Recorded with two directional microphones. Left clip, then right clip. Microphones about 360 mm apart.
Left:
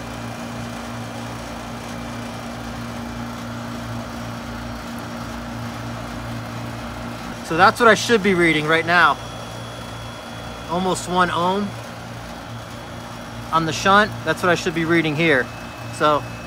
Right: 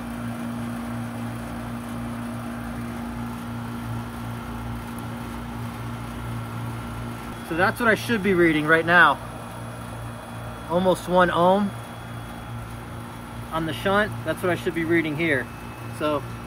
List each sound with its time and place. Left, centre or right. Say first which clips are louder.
7.5 s speech: left 8 dB; centre
10.7 s speech: right 1 dB; centre
13.5 s speech: left 8 dB; centre